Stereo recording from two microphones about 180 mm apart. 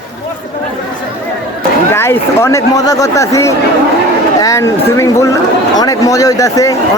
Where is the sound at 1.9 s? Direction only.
15° left (ahead or behind).